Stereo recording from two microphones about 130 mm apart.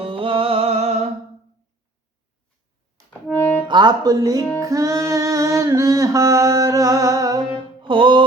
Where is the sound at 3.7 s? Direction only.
35° right (ahead or behind).